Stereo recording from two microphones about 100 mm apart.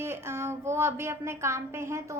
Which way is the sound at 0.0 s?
25° right (ahead or behind).